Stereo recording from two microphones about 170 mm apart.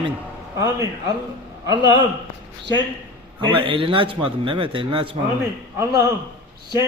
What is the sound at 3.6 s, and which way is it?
A man's voice, 30° right (ahead or behind).